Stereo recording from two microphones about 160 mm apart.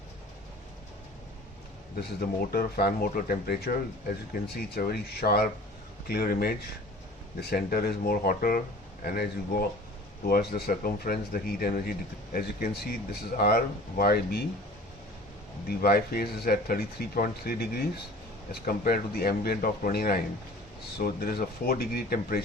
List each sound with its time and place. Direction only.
2.0 s speech: 70° left (ahead or behind)
15.6 s speech: 70° left (ahead or behind)